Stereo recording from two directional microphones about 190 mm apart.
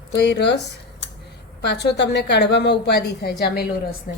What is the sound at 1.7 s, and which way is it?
Speech, 60° left (ahead or behind).